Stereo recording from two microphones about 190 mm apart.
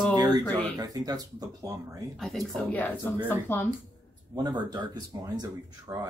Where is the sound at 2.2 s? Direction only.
Centre (ahead or behind).